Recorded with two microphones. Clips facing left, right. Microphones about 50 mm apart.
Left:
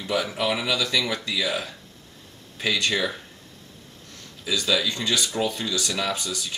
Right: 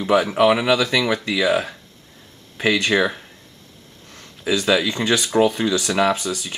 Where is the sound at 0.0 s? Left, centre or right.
Right.